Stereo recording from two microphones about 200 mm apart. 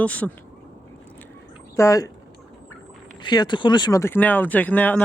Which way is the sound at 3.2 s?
20° left (ahead or behind).